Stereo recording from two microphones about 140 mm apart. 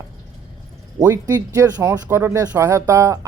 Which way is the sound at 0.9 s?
25° right (ahead or behind).